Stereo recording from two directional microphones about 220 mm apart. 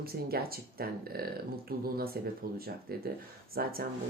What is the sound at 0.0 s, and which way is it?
Speech, 45° right (ahead or behind).